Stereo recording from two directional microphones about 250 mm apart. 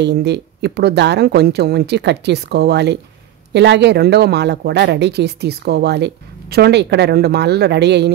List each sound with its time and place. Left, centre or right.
0.0 s speech: right